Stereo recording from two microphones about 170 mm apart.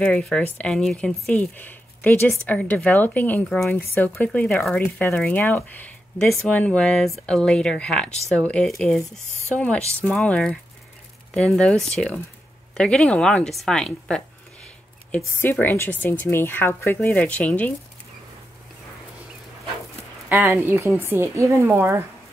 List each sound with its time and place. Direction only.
0.0 s a woman's voice: 5° left (ahead or behind)
20.2 s a woman's voice: 15° right (ahead or behind)